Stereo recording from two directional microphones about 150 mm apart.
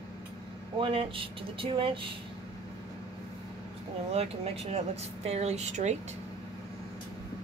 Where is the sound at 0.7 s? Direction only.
35° right (ahead or behind).